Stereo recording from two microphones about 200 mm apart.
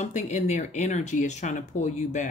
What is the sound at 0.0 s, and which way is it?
Speech, 35° left (ahead or behind).